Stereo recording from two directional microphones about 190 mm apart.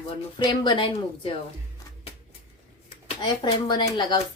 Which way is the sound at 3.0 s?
25° left (ahead or behind).